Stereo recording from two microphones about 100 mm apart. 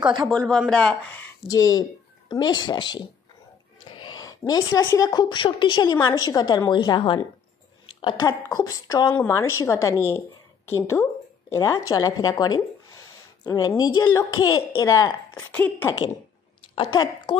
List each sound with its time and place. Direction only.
0.3 s a man's voice: 10° left (ahead or behind)
1.5 s a woman's voice: 35° left (ahead or behind)
3.9 s a sound: 50° left (ahead or behind)
4.3 s a woman's voice: 35° left (ahead or behind); by 8.3 s 55° left (ahead or behind)
8.3 s a woman's voice: 35° left (ahead or behind)
9.3 s a woman's voice: 30° left (ahead or behind)
15.3 s a woman's voice: 20° left (ahead or behind)
16.7 s a woman's voice: 50° left (ahead or behind)